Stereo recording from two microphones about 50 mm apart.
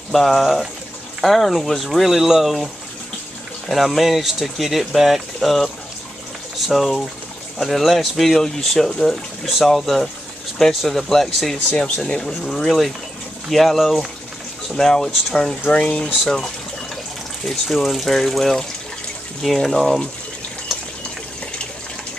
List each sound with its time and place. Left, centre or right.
0.1 s speech: centre
6.7 s speech: centre
17.5 s speech: centre